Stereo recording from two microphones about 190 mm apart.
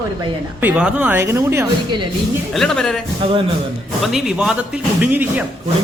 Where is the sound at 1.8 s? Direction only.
25° right (ahead or behind).